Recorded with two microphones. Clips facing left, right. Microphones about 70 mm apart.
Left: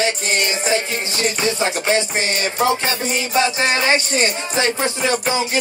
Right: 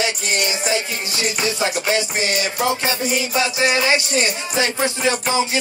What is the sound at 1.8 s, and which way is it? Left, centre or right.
Music, left.